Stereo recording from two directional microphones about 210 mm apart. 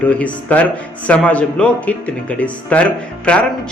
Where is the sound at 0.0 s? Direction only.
5° left (ahead or behind).